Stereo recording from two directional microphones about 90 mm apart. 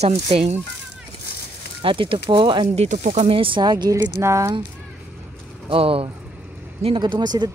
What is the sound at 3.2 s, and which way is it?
Speech, 85° right.